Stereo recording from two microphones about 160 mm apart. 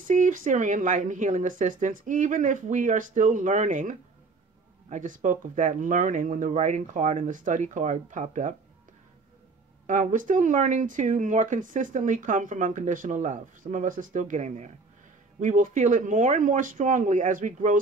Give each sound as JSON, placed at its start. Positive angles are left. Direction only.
{"t": 0.0, "sound": "speech", "side_deg": -55}
{"t": 9.8, "sound": "speech", "side_deg": -50}